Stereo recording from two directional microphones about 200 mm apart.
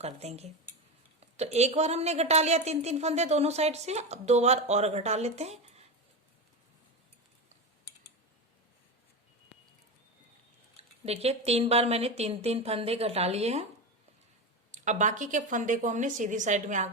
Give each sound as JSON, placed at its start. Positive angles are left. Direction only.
{"t": 0.0, "sound": "a woman's voice", "side_deg": -30}
{"t": 10.8, "sound": "a woman's voice", "side_deg": -30}
{"t": 14.7, "sound": "a woman's voice", "side_deg": -40}